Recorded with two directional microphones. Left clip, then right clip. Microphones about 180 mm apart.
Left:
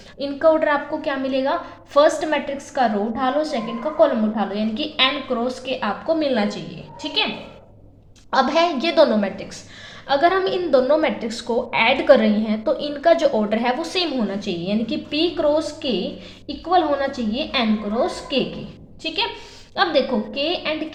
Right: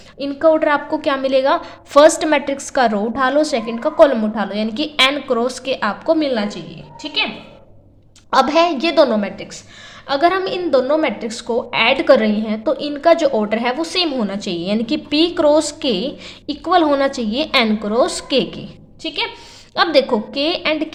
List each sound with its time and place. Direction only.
0.2 s a woman's voice: 20° right (ahead or behind)
0.9 s a woman's voice: 45° right (ahead or behind)
6.2 s a woman's voice: 20° right (ahead or behind)
8.3 s a woman's voice: 25° right (ahead or behind)
19.0 s a woman's voice: 20° right (ahead or behind)
19.7 s a woman's voice: 35° right (ahead or behind)